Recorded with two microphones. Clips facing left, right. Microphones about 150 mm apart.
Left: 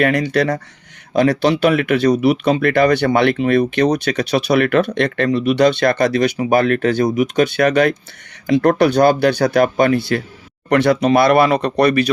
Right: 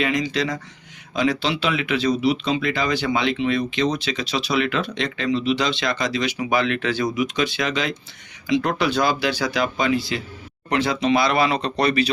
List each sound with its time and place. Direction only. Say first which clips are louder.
0.0 s speech: left 7 dB; 60° left (ahead or behind)